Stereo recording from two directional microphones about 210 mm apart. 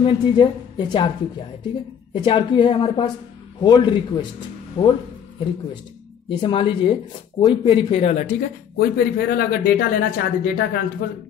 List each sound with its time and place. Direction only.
0.0 s speech: 20° left (ahead or behind)
2.2 s speech: 25° left (ahead or behind)
6.2 s speech: 25° left (ahead or behind)
8.7 s speech: 45° left (ahead or behind)